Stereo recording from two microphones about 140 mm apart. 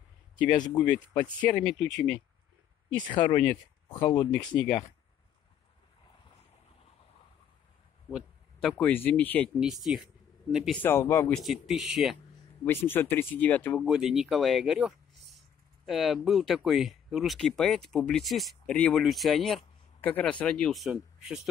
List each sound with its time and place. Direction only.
0.7 s speech: 5° left (ahead or behind)
3.0 s speech: 35° left (ahead or behind)
8.1 s speech: 5° left (ahead or behind)
9.6 s speech: 5° right (ahead or behind)
10.8 s speech: 15° left (ahead or behind)
11.3 s speech: centre (ahead or behind)
12.6 s speech: 15° left (ahead or behind)
13.8 s speech: 5° right (ahead or behind)
20.0 s speech: 10° left (ahead or behind); by 21.4 s 5° right (ahead or behind)